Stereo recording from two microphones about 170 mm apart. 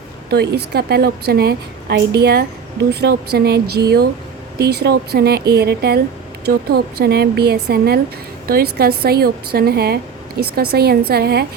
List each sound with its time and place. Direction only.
0.3 s a woman's voice: 75° right (ahead or behind)